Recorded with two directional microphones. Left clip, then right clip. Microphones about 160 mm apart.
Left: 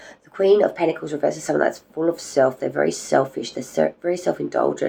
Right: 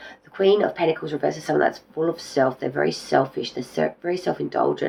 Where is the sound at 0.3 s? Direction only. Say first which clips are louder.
Left 2 dB; 45° left (ahead or behind).